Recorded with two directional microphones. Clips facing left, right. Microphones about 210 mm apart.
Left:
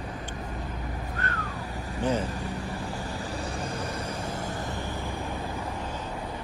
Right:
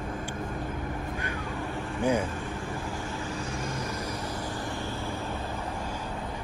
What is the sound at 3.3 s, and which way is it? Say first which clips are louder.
Vehicle: left 1 dB; 35° left (ahead or behind).